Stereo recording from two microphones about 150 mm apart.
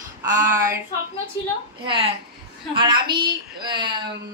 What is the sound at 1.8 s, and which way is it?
A woman's voice, 35° right (ahead or behind).